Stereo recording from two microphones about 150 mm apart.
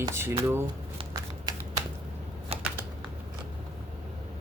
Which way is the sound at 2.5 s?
40° right (ahead or behind).